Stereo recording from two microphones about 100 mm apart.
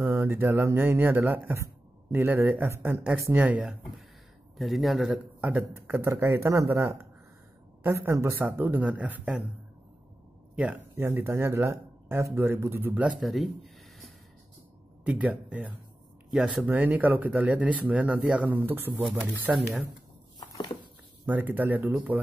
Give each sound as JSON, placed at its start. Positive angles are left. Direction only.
{"t": 0.0, "sound": "speech", "side_deg": -25}
{"t": 4.6, "sound": "speech", "side_deg": 0}
{"t": 5.4, "sound": "speech", "side_deg": -20}
{"t": 10.5, "sound": "speech", "side_deg": -15}
{"t": 13.0, "sound": "speech", "side_deg": 0}
{"t": 15.0, "sound": "speech", "side_deg": -15}
{"t": 16.6, "sound": "speech", "side_deg": -15}
{"t": 20.3, "sound": "a sound", "side_deg": 45}
{"t": 21.3, "sound": "speech", "side_deg": -15}